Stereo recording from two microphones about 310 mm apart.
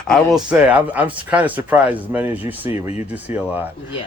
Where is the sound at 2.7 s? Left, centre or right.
Left.